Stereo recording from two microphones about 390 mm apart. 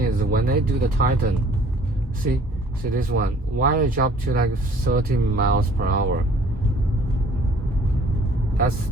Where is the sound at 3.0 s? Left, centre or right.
Right.